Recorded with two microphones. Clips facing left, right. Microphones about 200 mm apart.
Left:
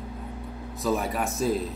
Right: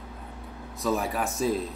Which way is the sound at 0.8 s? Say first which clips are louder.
Left 1 dB; centre (ahead or behind).